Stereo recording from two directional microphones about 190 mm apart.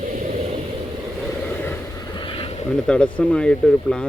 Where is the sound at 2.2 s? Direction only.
30° left (ahead or behind).